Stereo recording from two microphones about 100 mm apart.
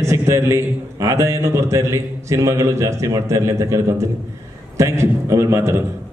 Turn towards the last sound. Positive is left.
turn(degrees=-25)  # may be behind; listen again after turning